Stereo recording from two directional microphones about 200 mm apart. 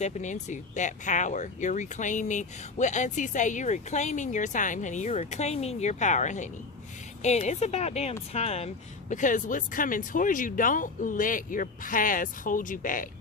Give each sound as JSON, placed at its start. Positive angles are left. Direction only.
{"t": 0.0, "sound": "speech", "side_deg": 35}